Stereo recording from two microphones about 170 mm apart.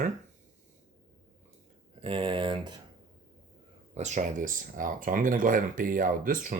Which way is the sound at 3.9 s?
45° right (ahead or behind).